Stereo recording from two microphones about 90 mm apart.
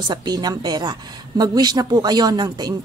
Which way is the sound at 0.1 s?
50° right (ahead or behind).